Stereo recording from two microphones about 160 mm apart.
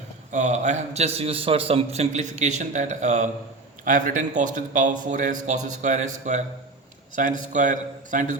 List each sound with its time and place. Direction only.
0.3 s a man's voice: 45° right (ahead or behind)